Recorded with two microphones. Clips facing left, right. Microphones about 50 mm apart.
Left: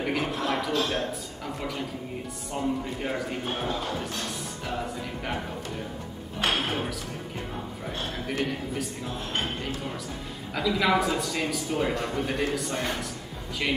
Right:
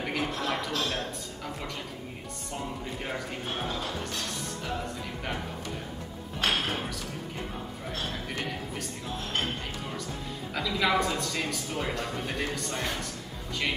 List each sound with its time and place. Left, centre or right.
0.0 s a man's voice: centre
6.4 s speech: centre
8.3 s a man's voice: centre
10.5 s a man's voice: centre